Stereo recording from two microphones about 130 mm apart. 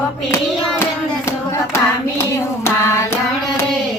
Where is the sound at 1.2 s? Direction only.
20° left (ahead or behind).